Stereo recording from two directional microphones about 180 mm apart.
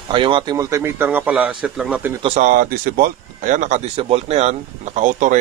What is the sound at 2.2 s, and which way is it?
Speech, 35° right (ahead or behind).